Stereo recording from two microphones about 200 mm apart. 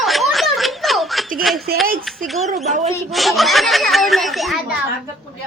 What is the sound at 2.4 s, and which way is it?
Speech, 35° right (ahead or behind).